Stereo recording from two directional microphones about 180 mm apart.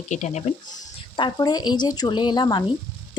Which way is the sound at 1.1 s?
25° left (ahead or behind).